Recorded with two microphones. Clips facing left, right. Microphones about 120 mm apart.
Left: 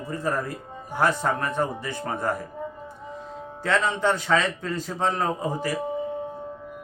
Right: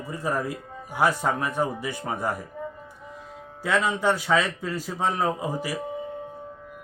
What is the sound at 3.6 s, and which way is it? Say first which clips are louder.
A man's voice: even; 10° right (ahead or behind).